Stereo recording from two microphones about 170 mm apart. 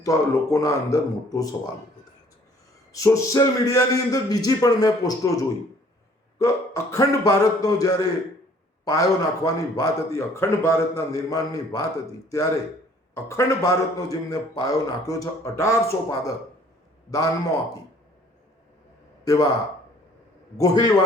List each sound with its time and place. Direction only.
0.0 s speech: 20° left (ahead or behind)
2.9 s speech: 20° left (ahead or behind)
13.1 s speech: 15° left (ahead or behind)
19.2 s speech: 20° left (ahead or behind)
20.6 s speech: 25° left (ahead or behind)